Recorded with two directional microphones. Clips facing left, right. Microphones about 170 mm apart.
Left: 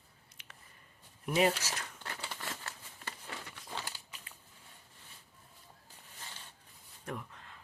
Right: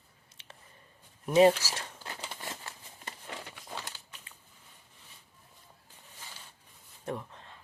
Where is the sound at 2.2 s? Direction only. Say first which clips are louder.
Right 1 dB; 20° right (ahead or behind).